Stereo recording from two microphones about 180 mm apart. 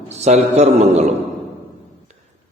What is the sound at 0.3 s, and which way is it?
Speech, 40° right (ahead or behind).